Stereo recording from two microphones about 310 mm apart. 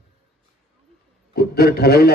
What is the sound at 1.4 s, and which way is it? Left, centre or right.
Speech, left.